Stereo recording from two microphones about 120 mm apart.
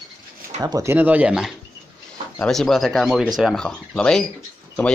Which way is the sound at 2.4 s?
5° left (ahead or behind).